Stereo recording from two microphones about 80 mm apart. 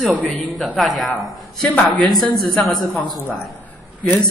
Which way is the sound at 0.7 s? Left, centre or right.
Centre.